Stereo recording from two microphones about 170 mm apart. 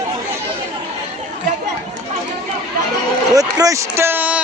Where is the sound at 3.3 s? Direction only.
20° right (ahead or behind).